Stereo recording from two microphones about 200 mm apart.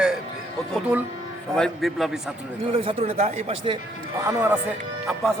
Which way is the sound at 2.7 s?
30° right (ahead or behind).